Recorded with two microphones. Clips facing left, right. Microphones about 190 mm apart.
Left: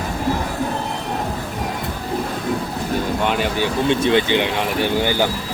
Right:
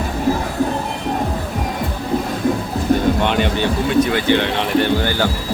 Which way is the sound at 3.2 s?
5° left (ahead or behind).